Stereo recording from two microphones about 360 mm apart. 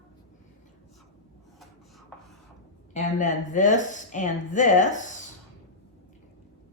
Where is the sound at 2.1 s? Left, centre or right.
Centre.